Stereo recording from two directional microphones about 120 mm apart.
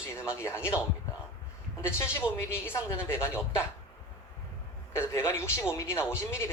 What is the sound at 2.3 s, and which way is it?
A man's voice, 20° left (ahead or behind).